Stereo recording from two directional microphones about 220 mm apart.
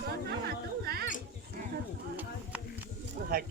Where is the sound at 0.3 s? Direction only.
45° right (ahead or behind).